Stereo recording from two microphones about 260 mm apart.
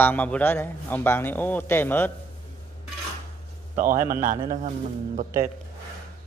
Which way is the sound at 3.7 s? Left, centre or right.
Right.